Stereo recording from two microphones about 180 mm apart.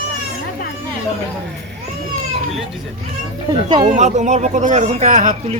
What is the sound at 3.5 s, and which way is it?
Speech, 25° right (ahead or behind).